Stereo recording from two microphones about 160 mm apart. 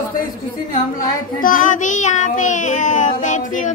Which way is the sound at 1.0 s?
60° left (ahead or behind).